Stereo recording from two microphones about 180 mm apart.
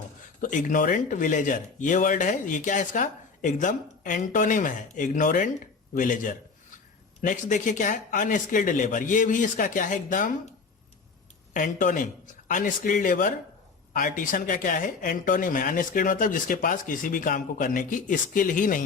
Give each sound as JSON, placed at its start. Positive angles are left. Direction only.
{"t": 0.4, "sound": "speech", "side_deg": 45}
{"t": 11.5, "sound": "speech", "side_deg": 45}